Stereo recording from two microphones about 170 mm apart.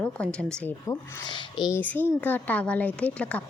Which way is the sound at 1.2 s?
30° left (ahead or behind).